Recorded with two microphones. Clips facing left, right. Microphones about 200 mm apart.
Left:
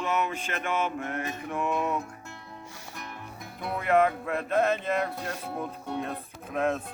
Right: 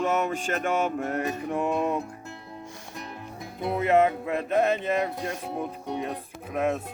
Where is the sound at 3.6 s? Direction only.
25° right (ahead or behind).